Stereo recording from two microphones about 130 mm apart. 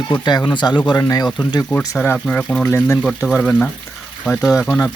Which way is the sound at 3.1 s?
10° left (ahead or behind).